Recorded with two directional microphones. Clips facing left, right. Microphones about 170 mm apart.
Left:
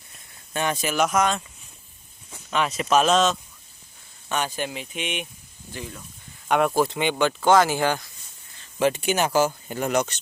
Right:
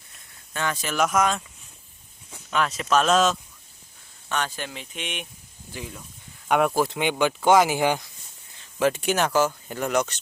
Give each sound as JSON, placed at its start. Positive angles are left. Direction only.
{"t": 0.5, "sound": "speech", "side_deg": 20}
{"t": 0.9, "sound": "speech", "side_deg": 0}
{"t": 2.5, "sound": "speech", "side_deg": 5}
{"t": 4.3, "sound": "speech", "side_deg": 10}
{"t": 5.7, "sound": "speech", "side_deg": -10}
{"t": 8.8, "sound": "speech", "side_deg": 0}